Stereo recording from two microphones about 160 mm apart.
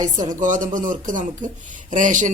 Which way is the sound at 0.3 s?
55° right (ahead or behind).